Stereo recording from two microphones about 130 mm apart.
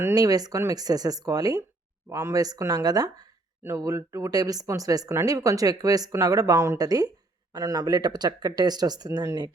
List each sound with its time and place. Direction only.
0.0 s speech: 30° right (ahead or behind)